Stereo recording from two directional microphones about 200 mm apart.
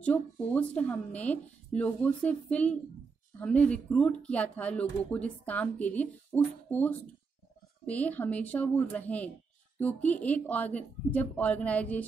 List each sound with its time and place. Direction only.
0.0 s speech: 5° left (ahead or behind)